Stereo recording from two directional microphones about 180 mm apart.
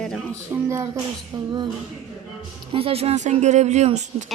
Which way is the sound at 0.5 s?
10° right (ahead or behind).